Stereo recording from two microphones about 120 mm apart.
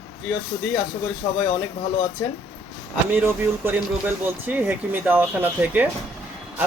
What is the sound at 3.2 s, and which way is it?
Speech, 15° right (ahead or behind).